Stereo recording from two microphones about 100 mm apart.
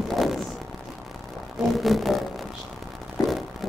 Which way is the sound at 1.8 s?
Centre (ahead or behind).